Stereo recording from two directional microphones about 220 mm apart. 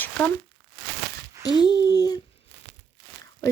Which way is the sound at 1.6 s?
20° left (ahead or behind).